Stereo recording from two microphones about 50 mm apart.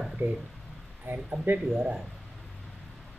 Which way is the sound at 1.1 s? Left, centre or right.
Right.